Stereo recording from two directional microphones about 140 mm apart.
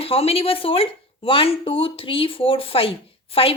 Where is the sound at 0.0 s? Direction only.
45° left (ahead or behind).